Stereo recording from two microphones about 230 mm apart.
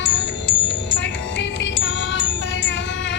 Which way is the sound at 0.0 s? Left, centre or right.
Left.